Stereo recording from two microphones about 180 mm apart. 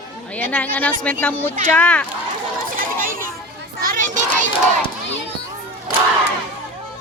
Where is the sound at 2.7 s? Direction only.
50° right (ahead or behind).